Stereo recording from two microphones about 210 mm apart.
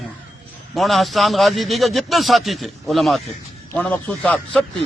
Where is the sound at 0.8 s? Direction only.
Centre (ahead or behind).